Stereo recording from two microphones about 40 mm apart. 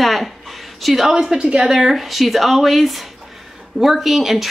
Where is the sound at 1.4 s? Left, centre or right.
Right.